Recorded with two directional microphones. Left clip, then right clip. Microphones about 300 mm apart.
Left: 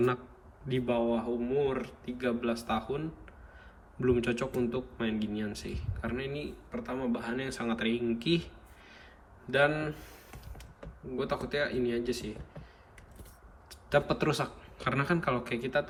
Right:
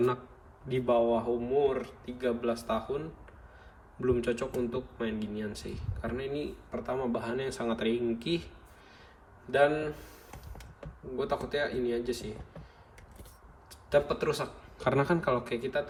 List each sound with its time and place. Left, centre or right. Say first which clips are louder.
0.7 s a man's voice: right 4 dB; centre
9.5 s a man's voice: right 1 dB; centre
11.2 s a man's voice: right 1 dB; centre
13.7 s a man's voice: right 1 dB; centre